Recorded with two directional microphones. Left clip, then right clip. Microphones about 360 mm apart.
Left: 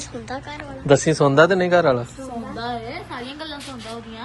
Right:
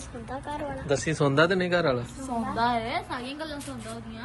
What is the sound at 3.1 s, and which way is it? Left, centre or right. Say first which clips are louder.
Speech: left 3 dB; centre.